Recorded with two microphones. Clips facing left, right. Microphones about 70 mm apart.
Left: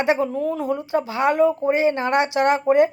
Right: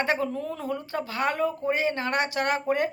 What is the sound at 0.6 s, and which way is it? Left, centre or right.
Speech, centre.